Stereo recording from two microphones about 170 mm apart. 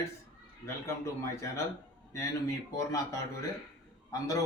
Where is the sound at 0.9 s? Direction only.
15° left (ahead or behind).